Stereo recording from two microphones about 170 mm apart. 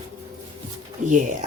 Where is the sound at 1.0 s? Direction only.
50° right (ahead or behind).